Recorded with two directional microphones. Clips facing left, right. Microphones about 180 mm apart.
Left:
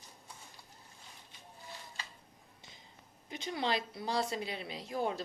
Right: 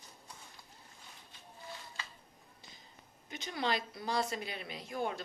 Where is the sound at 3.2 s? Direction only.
30° left (ahead or behind).